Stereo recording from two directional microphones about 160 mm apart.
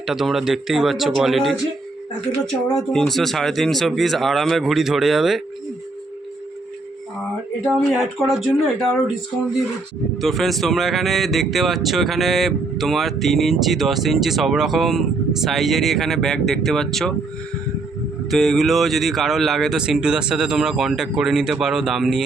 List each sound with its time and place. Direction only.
0.0 s speech: centre (ahead or behind)
2.9 s speech: centre (ahead or behind)
7.6 s speech: 5° right (ahead or behind)
10.2 s speech: centre (ahead or behind)
18.3 s speech: centre (ahead or behind)